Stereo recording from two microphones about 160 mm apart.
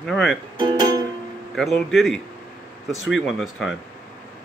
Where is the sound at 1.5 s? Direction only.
Centre (ahead or behind).